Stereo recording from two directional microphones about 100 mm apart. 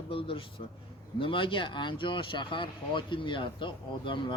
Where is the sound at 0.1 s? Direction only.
65° left (ahead or behind).